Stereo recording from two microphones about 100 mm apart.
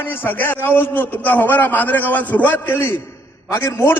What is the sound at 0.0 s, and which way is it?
A man's voice, 20° left (ahead or behind).